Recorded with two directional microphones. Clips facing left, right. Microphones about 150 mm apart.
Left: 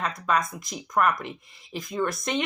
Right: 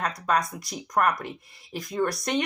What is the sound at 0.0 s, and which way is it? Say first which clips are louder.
Speech: even; 40° right (ahead or behind).